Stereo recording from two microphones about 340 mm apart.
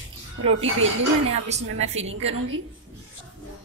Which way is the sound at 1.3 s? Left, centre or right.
Centre.